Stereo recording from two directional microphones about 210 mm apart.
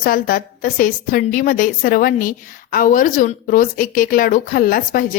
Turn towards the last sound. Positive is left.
turn(degrees=45)  # may be behind; listen again after turning